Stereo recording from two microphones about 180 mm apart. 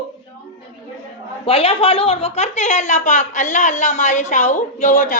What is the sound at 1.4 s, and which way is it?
A woman's voice, 30° left (ahead or behind).